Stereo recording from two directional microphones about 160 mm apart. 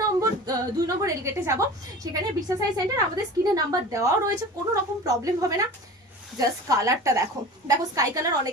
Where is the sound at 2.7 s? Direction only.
25° right (ahead or behind).